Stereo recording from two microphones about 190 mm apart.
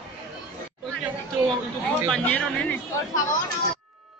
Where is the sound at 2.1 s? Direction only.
10° left (ahead or behind).